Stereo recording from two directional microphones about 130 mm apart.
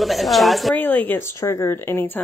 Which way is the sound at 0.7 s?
15° left (ahead or behind).